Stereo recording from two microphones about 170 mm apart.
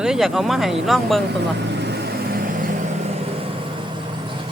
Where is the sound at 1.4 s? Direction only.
80° right.